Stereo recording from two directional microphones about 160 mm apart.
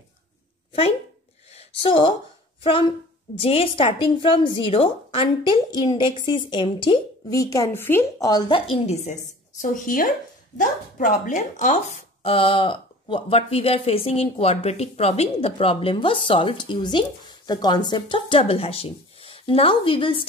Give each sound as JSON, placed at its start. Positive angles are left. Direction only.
{"t": 1.5, "sound": "a woman's voice", "side_deg": 35}